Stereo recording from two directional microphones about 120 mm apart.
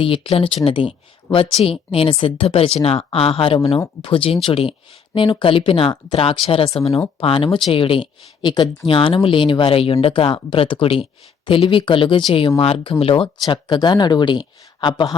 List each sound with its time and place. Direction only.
0.0 s speech: 50° left (ahead or behind)
13.5 s speech: 40° left (ahead or behind)